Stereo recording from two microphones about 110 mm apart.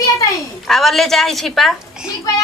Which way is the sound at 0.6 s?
Centre (ahead or behind).